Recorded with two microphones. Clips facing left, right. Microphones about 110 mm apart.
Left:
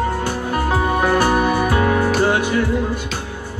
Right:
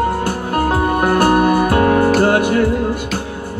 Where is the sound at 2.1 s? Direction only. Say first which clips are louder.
Right 4 dB; 55° right (ahead or behind).